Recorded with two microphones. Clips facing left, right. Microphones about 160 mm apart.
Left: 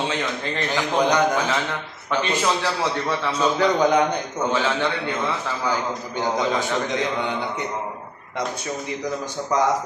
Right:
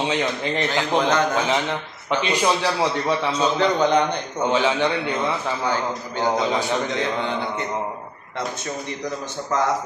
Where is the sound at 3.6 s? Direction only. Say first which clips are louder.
Left 1 dB; 10° left (ahead or behind).